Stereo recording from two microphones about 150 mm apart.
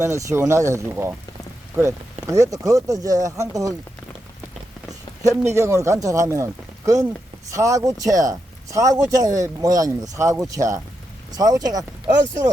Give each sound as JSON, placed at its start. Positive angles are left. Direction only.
{"t": 0.0, "sound": "speech", "side_deg": -20}
{"t": 5.2, "sound": "speech", "side_deg": -20}